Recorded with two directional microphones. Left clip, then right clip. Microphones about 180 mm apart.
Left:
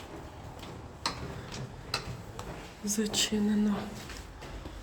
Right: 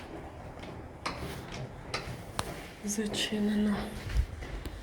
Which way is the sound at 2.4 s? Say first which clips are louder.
Right 7 dB; 60° right (ahead or behind).